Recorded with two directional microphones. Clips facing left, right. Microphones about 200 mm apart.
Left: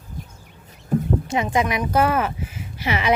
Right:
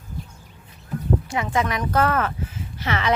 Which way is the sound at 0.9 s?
50° left (ahead or behind).